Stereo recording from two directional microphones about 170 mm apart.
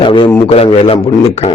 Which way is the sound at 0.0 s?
30° left (ahead or behind).